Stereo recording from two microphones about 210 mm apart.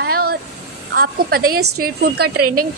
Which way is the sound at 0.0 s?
50° right (ahead or behind).